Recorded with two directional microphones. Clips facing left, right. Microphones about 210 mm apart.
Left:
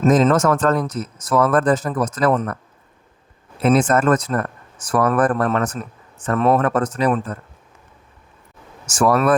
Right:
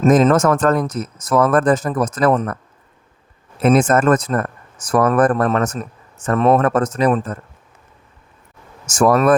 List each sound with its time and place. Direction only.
0.0 s speech: 50° right (ahead or behind)
3.6 s speech: 45° right (ahead or behind)
8.9 s speech: 45° right (ahead or behind)